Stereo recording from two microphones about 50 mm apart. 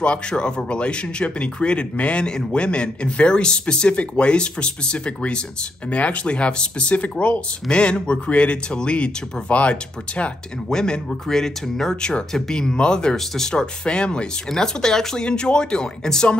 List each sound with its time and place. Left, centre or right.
0.0 s a man's voice: left
10.7 s speech: centre
12.3 s speech: centre
12.5 s speech: centre